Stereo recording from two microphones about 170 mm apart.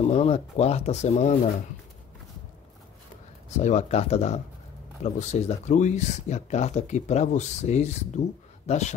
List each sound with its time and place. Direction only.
0.0 s speech: 40° left (ahead or behind)
3.4 s a man's voice: 45° left (ahead or behind)